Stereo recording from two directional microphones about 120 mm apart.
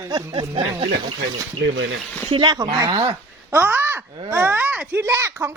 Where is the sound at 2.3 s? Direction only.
40° right (ahead or behind).